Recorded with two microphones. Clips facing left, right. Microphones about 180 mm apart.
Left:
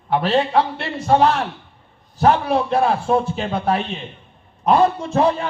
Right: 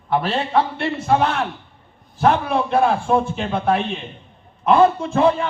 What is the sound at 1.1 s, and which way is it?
Speech, 55° right (ahead or behind).